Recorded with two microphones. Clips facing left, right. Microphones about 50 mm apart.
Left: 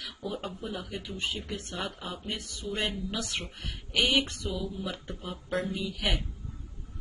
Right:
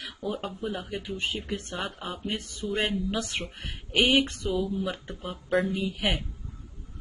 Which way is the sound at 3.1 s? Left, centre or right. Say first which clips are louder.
Right 3 dB; right.